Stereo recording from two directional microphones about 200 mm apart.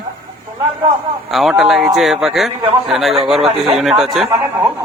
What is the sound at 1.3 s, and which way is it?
Speech, centre (ahead or behind).